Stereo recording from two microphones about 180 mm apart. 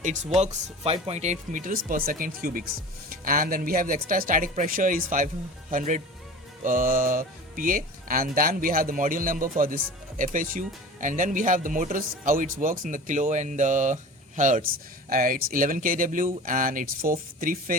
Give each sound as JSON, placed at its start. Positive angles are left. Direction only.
{"t": 0.3, "sound": "speech", "side_deg": -35}